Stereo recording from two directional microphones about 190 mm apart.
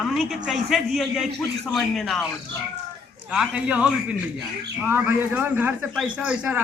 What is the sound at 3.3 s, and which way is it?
Speech, 5° right (ahead or behind).